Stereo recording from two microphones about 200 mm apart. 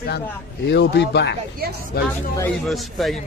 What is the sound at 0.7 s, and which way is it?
Speech, 60° left (ahead or behind).